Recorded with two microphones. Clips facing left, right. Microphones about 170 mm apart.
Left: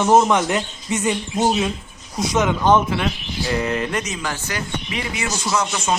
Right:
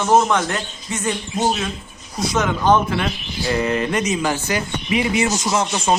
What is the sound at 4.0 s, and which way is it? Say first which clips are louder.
Speech: right 6 dB; 15° right (ahead or behind).